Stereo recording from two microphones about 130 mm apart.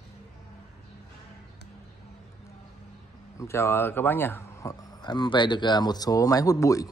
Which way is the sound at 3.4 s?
20° left (ahead or behind).